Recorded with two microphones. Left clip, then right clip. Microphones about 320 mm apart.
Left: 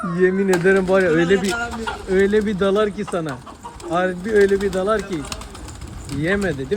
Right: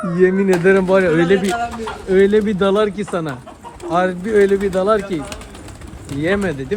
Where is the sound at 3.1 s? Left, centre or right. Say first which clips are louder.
Right 2 dB; right.